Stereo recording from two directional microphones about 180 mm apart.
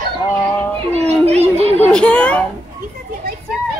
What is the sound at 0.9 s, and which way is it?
Children playing, 35° right (ahead or behind).